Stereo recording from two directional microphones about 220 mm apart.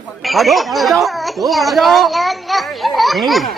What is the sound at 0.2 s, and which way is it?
Speech, centre (ahead or behind).